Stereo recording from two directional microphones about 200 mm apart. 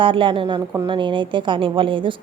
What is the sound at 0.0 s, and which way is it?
A woman's voice, 25° right (ahead or behind).